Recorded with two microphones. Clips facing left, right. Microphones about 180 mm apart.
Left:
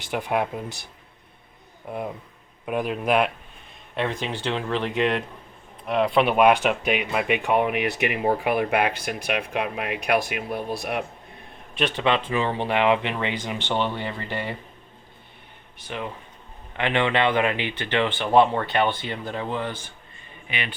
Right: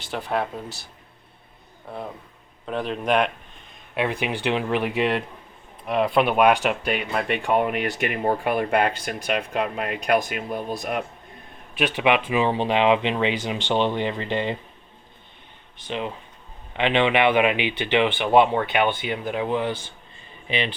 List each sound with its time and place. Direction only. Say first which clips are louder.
0.0 s speech: left 1 dB; 15° left (ahead or behind)
1.9 s speech: left 3 dB; 15° left (ahead or behind)
3.9 s speech: right 2 dB; 10° right (ahead or behind)
11.7 s speech: right 2 dB; 10° right (ahead or behind)
15.9 s speech: right 3 dB; 20° right (ahead or behind)